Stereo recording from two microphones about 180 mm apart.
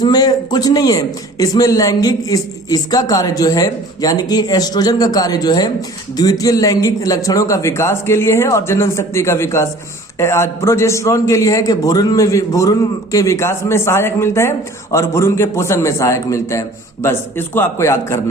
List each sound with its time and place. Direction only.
0.0 s a man's voice: 20° left (ahead or behind)